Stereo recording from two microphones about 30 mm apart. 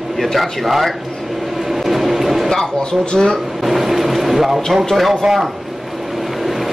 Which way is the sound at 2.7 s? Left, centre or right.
Left.